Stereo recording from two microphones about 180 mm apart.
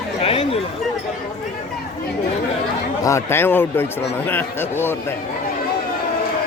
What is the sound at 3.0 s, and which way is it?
Speech, 15° left (ahead or behind).